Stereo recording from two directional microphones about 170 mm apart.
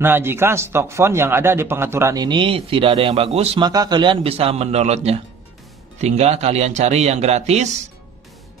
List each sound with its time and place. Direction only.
0.0 s a man's voice: 15° right (ahead or behind); by 3.6 s 35° right (ahead or behind)
3.6 s speech: 25° right (ahead or behind); by 7.7 s 40° right (ahead or behind)